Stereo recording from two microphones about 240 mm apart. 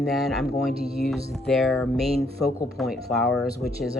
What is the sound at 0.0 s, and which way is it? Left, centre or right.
Music, centre.